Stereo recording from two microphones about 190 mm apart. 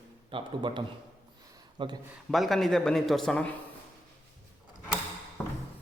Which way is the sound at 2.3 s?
Centre (ahead or behind).